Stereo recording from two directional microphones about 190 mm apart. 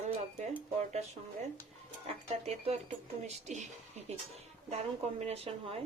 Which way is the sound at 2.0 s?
35° right (ahead or behind).